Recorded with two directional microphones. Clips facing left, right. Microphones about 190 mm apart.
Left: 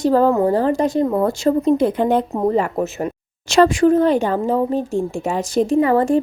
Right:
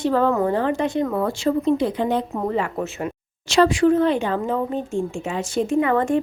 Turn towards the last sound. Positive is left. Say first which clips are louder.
# left 4 dB
turn(degrees=35)  # may be behind; listen again after turning